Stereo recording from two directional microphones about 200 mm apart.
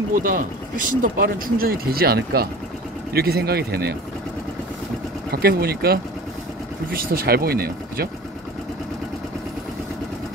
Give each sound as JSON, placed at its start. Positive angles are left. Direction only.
{"t": 0.1, "sound": "speech", "side_deg": -45}
{"t": 5.3, "sound": "speech", "side_deg": -50}